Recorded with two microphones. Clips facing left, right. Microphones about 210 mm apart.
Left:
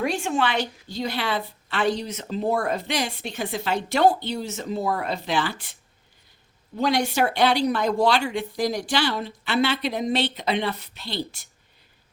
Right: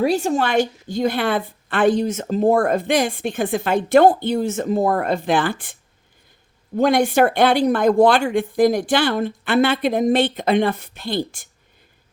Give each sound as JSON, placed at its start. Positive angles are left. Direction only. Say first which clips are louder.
{"t": 0.0, "sound": "a woman's voice", "louder": "right 6 dB", "side_deg": -40}
{"t": 6.7, "sound": "a woman's voice", "louder": "right 7 dB", "side_deg": -50}